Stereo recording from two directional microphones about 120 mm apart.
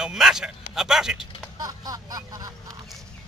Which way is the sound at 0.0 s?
5° right (ahead or behind).